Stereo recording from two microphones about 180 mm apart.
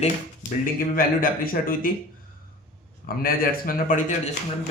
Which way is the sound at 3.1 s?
55° left (ahead or behind).